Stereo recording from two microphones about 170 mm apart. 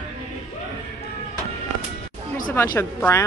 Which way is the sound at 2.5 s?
15° left (ahead or behind).